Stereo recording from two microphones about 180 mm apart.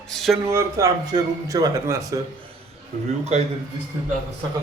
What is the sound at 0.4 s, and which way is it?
A man's voice, 15° right (ahead or behind).